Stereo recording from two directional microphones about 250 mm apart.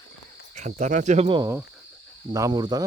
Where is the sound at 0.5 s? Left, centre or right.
Right.